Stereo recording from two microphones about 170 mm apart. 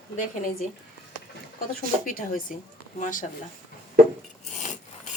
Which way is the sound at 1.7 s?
55° left (ahead or behind).